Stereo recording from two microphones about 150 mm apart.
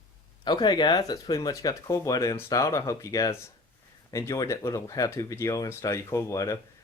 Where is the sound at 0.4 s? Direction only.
30° left (ahead or behind).